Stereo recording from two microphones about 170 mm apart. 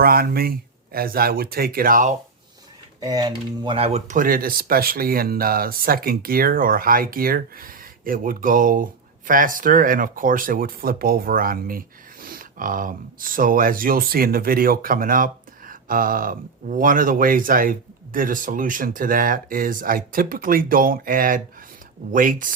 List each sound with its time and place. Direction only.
0.0 s speech: 60° right (ahead or behind)
3.0 s speech: 20° right (ahead or behind); by 22.5 s 50° right (ahead or behind)